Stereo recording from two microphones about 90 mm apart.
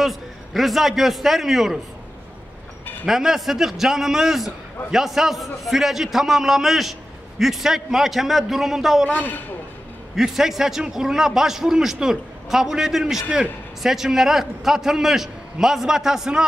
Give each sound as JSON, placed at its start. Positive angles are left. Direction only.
{"t": 0.0, "sound": "a man's voice", "side_deg": 0}
{"t": 3.1, "sound": "a man's voice", "side_deg": -5}
{"t": 9.1, "sound": "a man's voice", "side_deg": 20}
{"t": 10.1, "sound": "a man's voice", "side_deg": -5}